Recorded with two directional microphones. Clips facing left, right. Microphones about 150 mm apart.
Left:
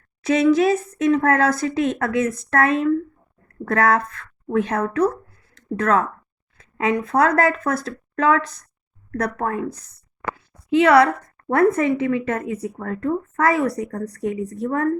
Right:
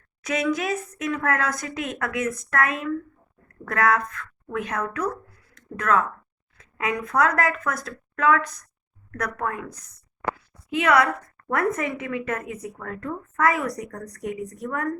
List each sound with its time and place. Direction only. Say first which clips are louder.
0.2 s a woman's voice: left 9 dB; 30° left (ahead or behind)